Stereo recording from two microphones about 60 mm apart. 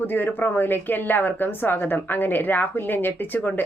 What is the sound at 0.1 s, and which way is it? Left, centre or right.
A woman's voice, left.